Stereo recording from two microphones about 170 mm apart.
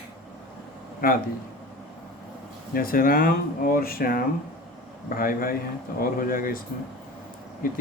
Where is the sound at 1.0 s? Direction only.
60° left (ahead or behind).